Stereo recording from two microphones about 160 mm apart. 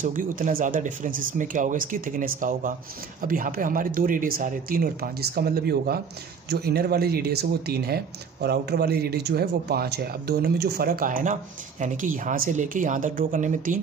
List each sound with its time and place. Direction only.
0.0 s speech: 55° right (ahead or behind); by 5.9 s 75° right (ahead or behind)
6.5 s speech: 85° right; by 13.7 s 55° right (ahead or behind)